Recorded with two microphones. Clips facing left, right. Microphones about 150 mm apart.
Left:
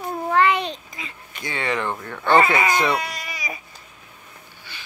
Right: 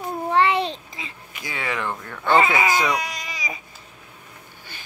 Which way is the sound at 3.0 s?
15° right (ahead or behind).